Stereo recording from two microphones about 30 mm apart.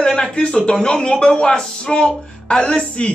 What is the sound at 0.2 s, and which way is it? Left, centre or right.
Speech, left.